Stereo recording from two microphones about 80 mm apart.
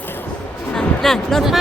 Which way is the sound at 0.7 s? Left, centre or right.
Centre.